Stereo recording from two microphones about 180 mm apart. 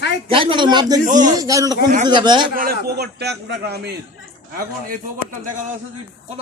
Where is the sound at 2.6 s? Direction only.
60° right (ahead or behind).